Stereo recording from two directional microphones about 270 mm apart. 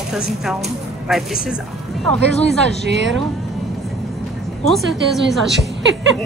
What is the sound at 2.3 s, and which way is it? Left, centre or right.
Speech, left.